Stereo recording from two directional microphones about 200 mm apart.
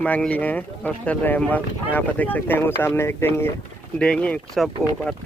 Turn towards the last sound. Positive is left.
turn(degrees=5)  # may be behind; listen again after turning